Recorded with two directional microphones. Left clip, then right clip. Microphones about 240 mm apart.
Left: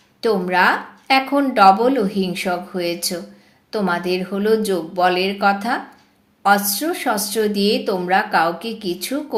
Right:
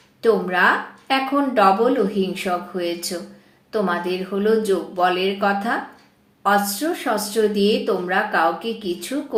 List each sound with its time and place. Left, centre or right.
0.2 s speech: left